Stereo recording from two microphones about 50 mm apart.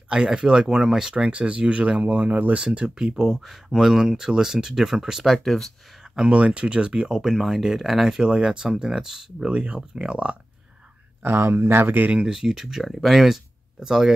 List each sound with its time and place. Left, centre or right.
0.1 s speech: centre
1.1 s speech: right
2.6 s speech: centre
3.3 s speech: centre
5.4 s speech: centre
6.1 s speech: centre
7.2 s speech: centre; by 10.3 s right
11.2 s speech: right
12.1 s speech: right
12.4 s speech: centre